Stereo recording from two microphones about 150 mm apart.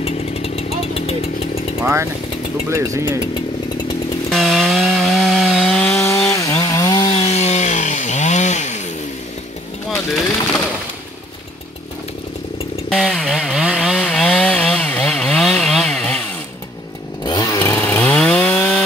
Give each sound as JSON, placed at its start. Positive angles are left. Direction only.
{"t": 0.0, "sound": "chainsaw", "side_deg": 45}
{"t": 2.7, "sound": "speech", "side_deg": -20}
{"t": 4.3, "sound": "wood", "side_deg": 0}
{"t": 7.1, "sound": "chainsaw", "side_deg": 40}
{"t": 9.8, "sound": "a sound", "side_deg": 0}
{"t": 12.9, "sound": "chainsaw", "side_deg": 0}
{"t": 17.2, "sound": "chainsaw", "side_deg": 25}